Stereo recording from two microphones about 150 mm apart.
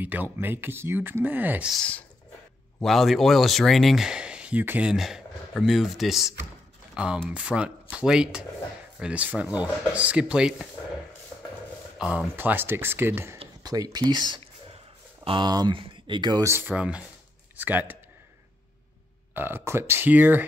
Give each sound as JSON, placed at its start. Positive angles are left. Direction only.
{"t": 0.0, "sound": "speech", "side_deg": -10}
{"t": 1.7, "sound": "speech", "side_deg": 5}
{"t": 12.0, "sound": "speech", "side_deg": -5}
{"t": 13.6, "sound": "speech", "side_deg": -25}
{"t": 19.3, "sound": "speech", "side_deg": -15}